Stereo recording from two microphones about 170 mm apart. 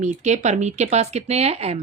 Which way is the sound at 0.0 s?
45° right (ahead or behind).